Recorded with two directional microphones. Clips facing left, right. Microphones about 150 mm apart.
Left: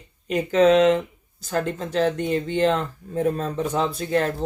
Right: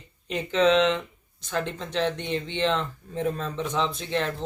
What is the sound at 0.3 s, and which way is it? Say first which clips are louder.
Speech: left 5 dB; 50° left (ahead or behind).